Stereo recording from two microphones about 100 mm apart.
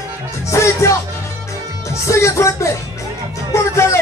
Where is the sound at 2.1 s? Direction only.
30° left (ahead or behind).